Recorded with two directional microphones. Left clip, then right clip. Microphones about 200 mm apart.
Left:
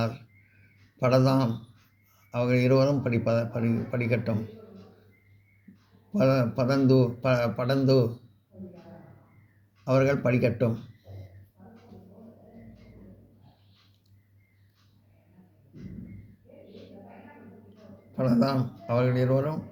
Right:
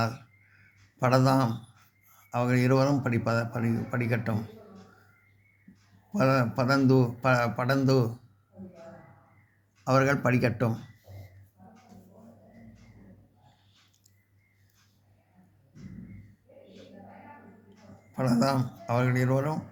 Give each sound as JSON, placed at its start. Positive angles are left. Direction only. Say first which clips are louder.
{"t": 0.9, "sound": "speech", "louder": "left 1 dB", "side_deg": -40}
{"t": 6.1, "sound": "speech", "louder": "left 1 dB", "side_deg": -45}
{"t": 9.8, "sound": "speech", "louder": "even", "side_deg": -45}
{"t": 18.1, "sound": "speech", "louder": "left 1 dB", "side_deg": -45}